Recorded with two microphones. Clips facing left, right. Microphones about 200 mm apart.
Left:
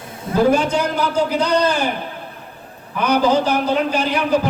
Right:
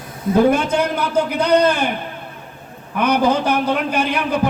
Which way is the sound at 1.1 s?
55° right (ahead or behind).